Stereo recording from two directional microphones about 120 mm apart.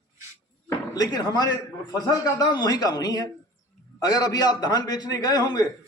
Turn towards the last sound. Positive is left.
turn(degrees=35)  # may be behind; listen again after turning